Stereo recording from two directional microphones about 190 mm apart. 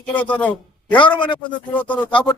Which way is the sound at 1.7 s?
10° left (ahead or behind).